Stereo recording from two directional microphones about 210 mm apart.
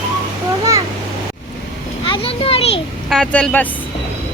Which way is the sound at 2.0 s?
25° left (ahead or behind).